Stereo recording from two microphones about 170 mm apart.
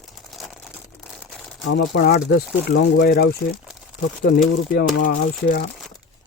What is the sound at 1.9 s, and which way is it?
Speech, 75° left (ahead or behind).